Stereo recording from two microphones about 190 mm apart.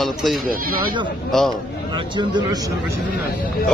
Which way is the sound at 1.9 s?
25° right (ahead or behind).